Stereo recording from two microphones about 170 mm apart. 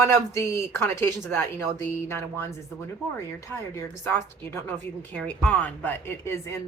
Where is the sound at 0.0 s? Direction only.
15° left (ahead or behind).